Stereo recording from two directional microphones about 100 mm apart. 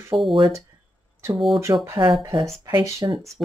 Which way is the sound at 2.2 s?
40° right (ahead or behind).